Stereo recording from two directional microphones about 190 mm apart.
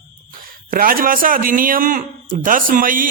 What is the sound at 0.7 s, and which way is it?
A man's voice, 50° right (ahead or behind).